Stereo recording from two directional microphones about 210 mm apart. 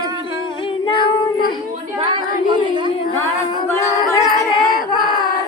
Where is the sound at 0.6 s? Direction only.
25° left (ahead or behind).